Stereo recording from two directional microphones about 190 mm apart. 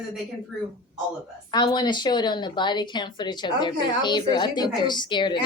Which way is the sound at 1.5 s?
20° left (ahead or behind).